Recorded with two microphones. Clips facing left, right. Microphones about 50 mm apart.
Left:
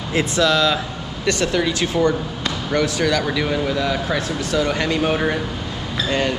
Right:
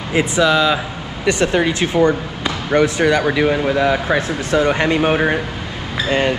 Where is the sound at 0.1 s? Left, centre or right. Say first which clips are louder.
Right 3 dB; centre.